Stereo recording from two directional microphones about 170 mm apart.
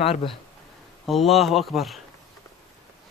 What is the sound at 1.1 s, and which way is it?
Speech, centre (ahead or behind).